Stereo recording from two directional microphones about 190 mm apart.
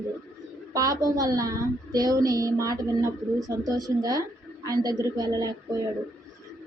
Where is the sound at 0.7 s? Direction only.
20° right (ahead or behind).